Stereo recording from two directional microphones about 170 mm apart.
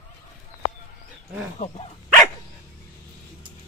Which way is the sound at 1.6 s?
40° left (ahead or behind).